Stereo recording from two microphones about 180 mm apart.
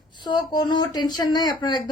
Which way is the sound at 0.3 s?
25° left (ahead or behind).